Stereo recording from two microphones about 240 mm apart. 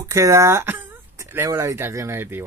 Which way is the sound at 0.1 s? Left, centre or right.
Centre.